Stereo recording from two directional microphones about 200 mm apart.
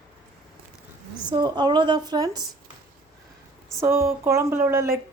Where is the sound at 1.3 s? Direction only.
20° right (ahead or behind).